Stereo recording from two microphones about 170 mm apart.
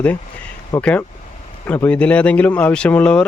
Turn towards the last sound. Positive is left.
turn(degrees=10)  # may be behind; listen again after turning